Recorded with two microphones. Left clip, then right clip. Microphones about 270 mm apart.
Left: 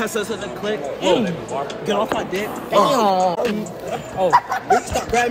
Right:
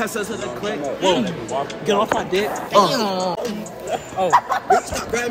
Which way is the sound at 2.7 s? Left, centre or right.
Centre.